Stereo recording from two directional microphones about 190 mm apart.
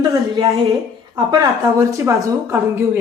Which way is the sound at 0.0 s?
20° right (ahead or behind).